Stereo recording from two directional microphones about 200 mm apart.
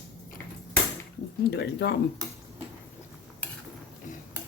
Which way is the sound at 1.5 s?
55° left (ahead or behind).